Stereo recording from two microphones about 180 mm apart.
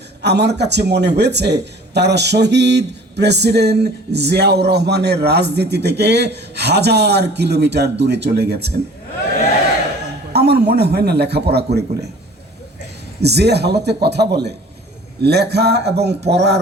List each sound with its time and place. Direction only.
0.2 s a man's voice: 70° right (ahead or behind)
10.3 s a man's voice: 65° right (ahead or behind)
13.2 s a man's voice: 65° right (ahead or behind)